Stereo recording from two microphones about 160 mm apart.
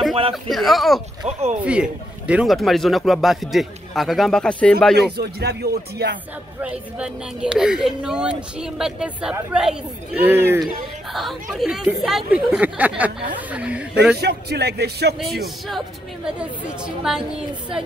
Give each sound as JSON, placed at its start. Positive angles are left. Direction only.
{"t": 0.3, "sound": "speech", "side_deg": 0}
{"t": 1.2, "sound": "speech", "side_deg": -45}
{"t": 1.6, "sound": "speech", "side_deg": -5}
{"t": 4.9, "sound": "speech", "side_deg": -90}
{"t": 6.6, "sound": "speech", "side_deg": -5}
{"t": 11.5, "sound": "speech", "side_deg": -5}
{"t": 14.1, "sound": "speech", "side_deg": -90}
{"t": 15.1, "sound": "speech", "side_deg": 0}